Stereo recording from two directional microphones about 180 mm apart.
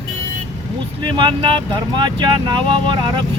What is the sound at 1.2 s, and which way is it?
Speech, 30° right (ahead or behind).